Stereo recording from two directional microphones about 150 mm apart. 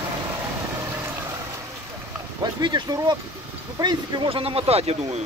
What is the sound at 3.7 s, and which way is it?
Speech, 30° right (ahead or behind).